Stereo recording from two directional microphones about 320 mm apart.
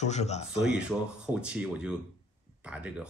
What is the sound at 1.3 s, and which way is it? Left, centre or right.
Speech, centre.